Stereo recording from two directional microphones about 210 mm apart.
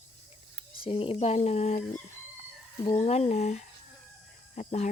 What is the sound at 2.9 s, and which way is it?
Speech, 30° left (ahead or behind).